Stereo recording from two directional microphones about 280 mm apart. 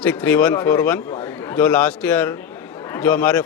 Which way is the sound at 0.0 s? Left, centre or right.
Centre.